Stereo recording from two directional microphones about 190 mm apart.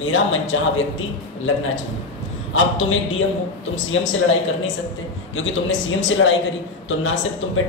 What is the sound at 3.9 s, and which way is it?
Speech, 90° left.